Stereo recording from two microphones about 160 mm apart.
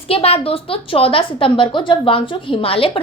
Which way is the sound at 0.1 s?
40° left (ahead or behind).